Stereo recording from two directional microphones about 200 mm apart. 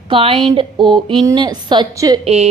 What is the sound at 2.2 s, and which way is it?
Speech, 30° right (ahead or behind).